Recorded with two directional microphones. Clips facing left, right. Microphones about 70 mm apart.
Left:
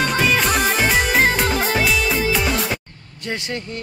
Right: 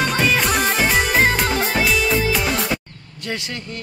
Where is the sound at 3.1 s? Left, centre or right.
Left.